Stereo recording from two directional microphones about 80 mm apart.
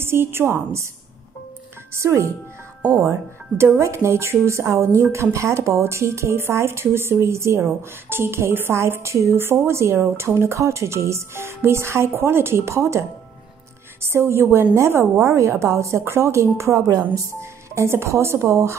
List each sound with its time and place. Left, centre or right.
0.0 s a woman's voice: right
2.0 s a woman's voice: right
14.0 s a woman's voice: right